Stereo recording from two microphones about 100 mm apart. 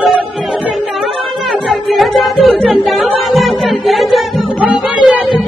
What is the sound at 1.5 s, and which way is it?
Music, centre (ahead or behind).